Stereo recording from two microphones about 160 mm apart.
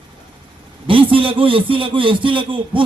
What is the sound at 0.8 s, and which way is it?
A man's voice, 35° right (ahead or behind).